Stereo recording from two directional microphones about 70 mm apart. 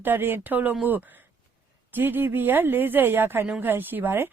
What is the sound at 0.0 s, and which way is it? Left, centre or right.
Speech, right.